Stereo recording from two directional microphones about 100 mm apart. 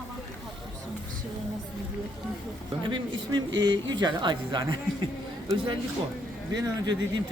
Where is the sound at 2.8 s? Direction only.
45° right (ahead or behind).